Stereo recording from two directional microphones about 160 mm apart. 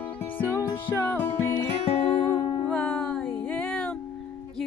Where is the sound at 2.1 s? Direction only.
35° left (ahead or behind).